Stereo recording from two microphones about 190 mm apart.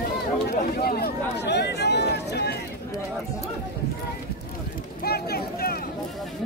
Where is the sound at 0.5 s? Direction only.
55° left (ahead or behind).